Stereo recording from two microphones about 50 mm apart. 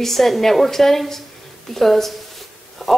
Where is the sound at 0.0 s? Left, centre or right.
Centre.